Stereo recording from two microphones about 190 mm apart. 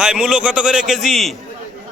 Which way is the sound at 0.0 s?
5° right (ahead or behind).